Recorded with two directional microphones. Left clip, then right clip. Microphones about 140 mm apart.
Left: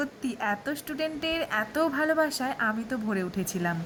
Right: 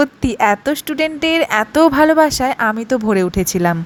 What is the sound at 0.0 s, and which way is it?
Speech, 50° right (ahead or behind).